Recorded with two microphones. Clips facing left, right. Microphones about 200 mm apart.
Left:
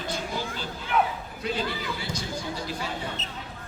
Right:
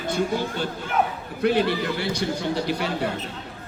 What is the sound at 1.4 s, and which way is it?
A man's voice, 65° right (ahead or behind).